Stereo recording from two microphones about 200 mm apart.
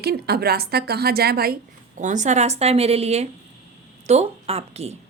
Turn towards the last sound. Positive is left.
turn(degrees=-30)  # may be behind; listen again after turning